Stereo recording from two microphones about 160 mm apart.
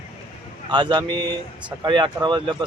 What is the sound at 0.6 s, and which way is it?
Speech, 30° right (ahead or behind).